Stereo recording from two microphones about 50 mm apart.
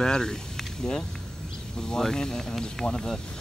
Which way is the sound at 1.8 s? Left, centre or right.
Centre.